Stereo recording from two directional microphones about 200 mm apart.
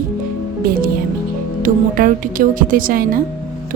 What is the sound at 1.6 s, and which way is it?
A woman's voice, 40° right (ahead or behind).